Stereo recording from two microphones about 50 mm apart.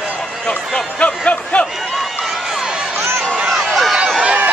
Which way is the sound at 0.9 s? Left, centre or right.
Left.